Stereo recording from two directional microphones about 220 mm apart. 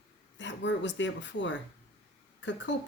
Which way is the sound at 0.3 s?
55° left (ahead or behind).